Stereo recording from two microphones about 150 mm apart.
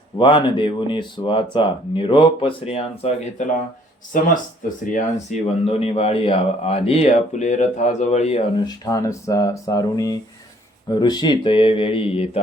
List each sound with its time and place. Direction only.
0.2 s speech: 30° left (ahead or behind)
4.1 s speech: 65° left (ahead or behind)
5.6 s speech: 40° left (ahead or behind)
8.6 s speech: 25° left (ahead or behind)